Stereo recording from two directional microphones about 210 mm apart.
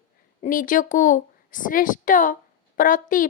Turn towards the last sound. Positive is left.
turn(degrees=40)  # may be behind; listen again after turning